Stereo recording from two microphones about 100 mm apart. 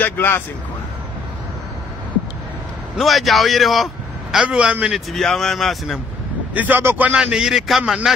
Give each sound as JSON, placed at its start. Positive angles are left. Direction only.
{"t": 0.0, "sound": "speech", "side_deg": 20}
{"t": 3.0, "sound": "a man's voice", "side_deg": 0}
{"t": 5.1, "sound": "a man's voice", "side_deg": 5}
{"t": 6.5, "sound": "speech", "side_deg": -15}
{"t": 7.2, "sound": "a man's voice", "side_deg": -5}